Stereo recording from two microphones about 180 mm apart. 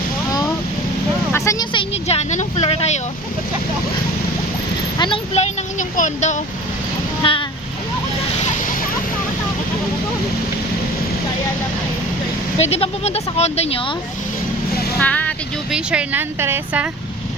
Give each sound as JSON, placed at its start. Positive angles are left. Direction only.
{"t": 1.3, "sound": "vehicle", "side_deg": 20}
{"t": 4.9, "sound": "a sound", "side_deg": 30}
{"t": 6.0, "sound": "speech", "side_deg": 40}
{"t": 7.2, "sound": "vehicle", "side_deg": 30}
{"t": 12.7, "sound": "speech", "side_deg": 35}
{"t": 14.9, "sound": "vehicle", "side_deg": 10}
{"t": 15.7, "sound": "speech", "side_deg": -5}